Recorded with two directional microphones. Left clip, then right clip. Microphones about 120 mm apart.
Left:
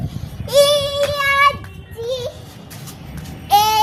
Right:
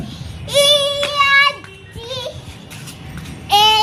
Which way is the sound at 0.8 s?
30° left (ahead or behind).